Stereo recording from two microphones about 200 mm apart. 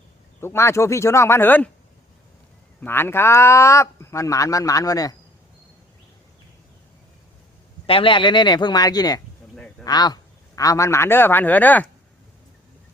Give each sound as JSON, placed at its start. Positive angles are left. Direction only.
{"t": 0.3, "sound": "speech", "side_deg": 10}
{"t": 2.8, "sound": "speech", "side_deg": 10}
{"t": 7.9, "sound": "speech", "side_deg": 25}